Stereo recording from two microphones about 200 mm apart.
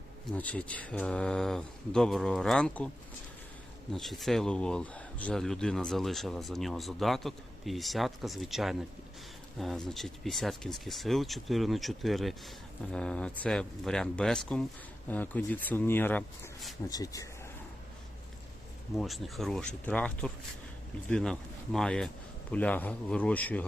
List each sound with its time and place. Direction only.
0.3 s speech: 5° left (ahead or behind)
3.9 s speech: centre (ahead or behind)
16.9 s speech: 15° left (ahead or behind)
18.9 s speech: centre (ahead or behind)